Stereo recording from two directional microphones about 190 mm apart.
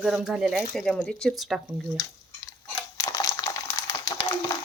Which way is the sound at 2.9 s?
15° left (ahead or behind).